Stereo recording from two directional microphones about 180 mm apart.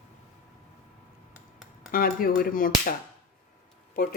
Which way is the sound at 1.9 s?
55° left (ahead or behind).